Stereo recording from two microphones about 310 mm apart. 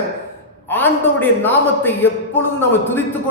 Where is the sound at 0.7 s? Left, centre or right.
Centre.